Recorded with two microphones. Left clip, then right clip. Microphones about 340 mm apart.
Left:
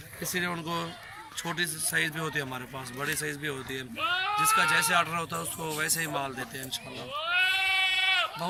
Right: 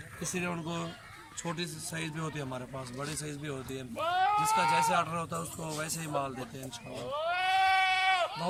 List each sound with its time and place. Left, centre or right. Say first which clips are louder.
0.2 s speech: left 4 dB; centre
7.2 s sheep: left 2 dB; centre